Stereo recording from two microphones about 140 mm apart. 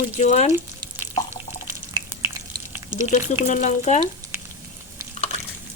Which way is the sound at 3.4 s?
60° left (ahead or behind).